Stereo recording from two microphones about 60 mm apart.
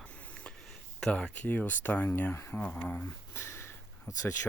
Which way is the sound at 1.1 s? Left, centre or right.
Left.